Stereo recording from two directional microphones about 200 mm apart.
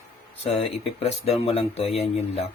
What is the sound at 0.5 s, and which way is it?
Speech, 30° left (ahead or behind).